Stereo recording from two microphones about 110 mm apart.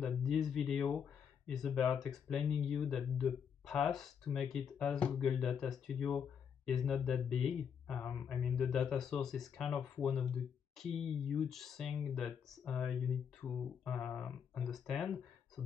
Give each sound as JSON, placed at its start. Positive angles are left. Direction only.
{"t": 0.0, "sound": "speech", "side_deg": 5}